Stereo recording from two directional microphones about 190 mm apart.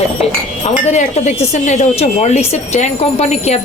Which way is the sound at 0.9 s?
35° left (ahead or behind).